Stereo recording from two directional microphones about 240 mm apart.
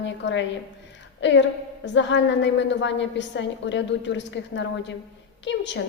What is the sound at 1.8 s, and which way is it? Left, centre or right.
A woman's voice, left.